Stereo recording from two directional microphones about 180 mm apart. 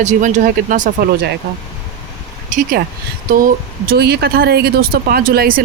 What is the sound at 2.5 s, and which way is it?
Speech, 45° right (ahead or behind).